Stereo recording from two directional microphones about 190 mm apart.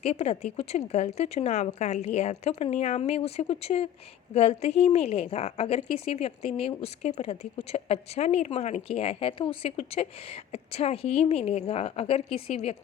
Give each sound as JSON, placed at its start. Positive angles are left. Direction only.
{"t": 0.0, "sound": "a woman's voice", "side_deg": 35}